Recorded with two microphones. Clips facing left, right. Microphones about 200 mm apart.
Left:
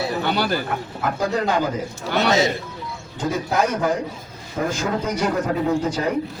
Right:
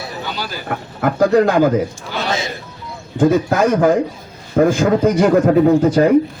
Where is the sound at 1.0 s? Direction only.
55° right (ahead or behind).